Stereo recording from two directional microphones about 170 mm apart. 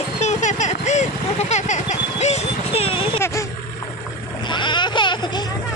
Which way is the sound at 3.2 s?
15° left (ahead or behind).